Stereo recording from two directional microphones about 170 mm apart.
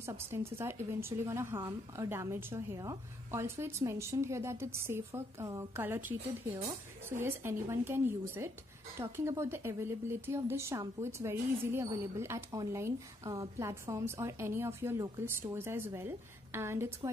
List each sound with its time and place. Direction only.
0.0 s speech: 15° right (ahead or behind)